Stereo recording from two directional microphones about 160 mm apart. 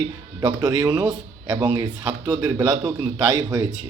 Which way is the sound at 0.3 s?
25° right (ahead or behind).